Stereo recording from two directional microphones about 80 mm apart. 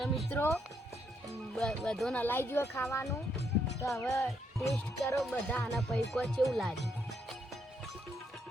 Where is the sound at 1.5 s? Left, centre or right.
Centre.